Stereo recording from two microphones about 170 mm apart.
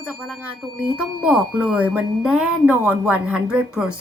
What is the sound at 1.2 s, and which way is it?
A woman's voice, 5° right (ahead or behind).